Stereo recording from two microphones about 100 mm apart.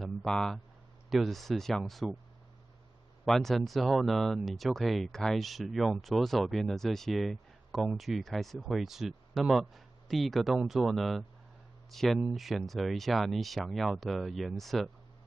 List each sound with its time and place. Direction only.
0.0 s a sound: centre (ahead or behind)
1.1 s speech: centre (ahead or behind)
3.3 s speech: centre (ahead or behind)